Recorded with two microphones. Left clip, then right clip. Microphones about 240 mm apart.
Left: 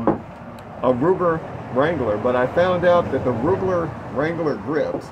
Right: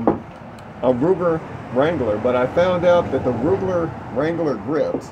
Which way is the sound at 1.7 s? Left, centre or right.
Centre.